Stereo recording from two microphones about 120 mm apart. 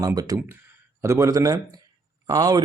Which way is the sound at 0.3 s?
20° right (ahead or behind).